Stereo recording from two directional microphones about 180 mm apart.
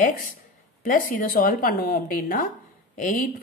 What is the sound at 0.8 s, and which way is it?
A woman's voice, 45° left (ahead or behind).